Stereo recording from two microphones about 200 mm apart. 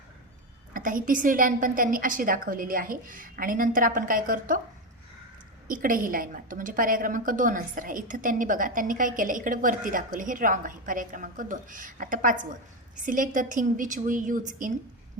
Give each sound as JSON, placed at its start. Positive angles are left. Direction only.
{"t": 0.7, "sound": "a woman's voice", "side_deg": -45}
{"t": 5.6, "sound": "a woman's voice", "side_deg": -45}